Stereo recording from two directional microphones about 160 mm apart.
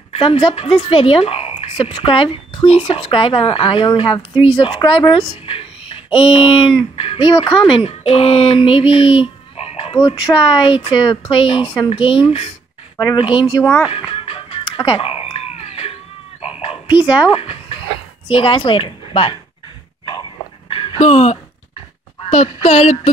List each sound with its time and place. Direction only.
0.1 s a woman's voice: 35° left (ahead or behind)
9.9 s a woman's voice: 25° left (ahead or behind)
12.9 s speech: 25° left (ahead or behind)
13.8 s music: 35° left (ahead or behind)
17.3 s a woman's voice: 35° left (ahead or behind)
20.1 s dog: 30° left (ahead or behind)
22.3 s a woman's voice: 40° left (ahead or behind)